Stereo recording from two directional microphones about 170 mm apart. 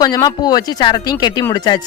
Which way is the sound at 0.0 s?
25° left (ahead or behind).